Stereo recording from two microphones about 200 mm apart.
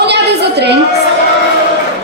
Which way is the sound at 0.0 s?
55° right (ahead or behind).